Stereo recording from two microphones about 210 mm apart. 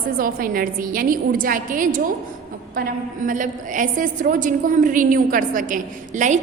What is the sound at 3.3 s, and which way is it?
A woman's voice, 40° right (ahead or behind).